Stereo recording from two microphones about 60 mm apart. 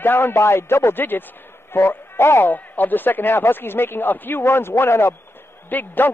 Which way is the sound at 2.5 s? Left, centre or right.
Left.